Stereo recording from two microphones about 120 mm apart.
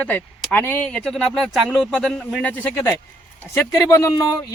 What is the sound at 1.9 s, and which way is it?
Speech, 10° left (ahead or behind).